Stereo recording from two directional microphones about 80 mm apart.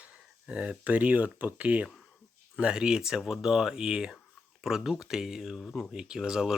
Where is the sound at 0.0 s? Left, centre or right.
Centre.